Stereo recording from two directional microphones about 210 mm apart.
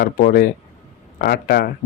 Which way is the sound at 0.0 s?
45° left (ahead or behind).